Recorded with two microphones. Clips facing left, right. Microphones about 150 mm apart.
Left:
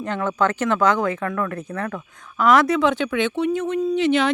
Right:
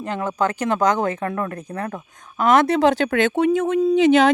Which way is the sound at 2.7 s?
35° right (ahead or behind).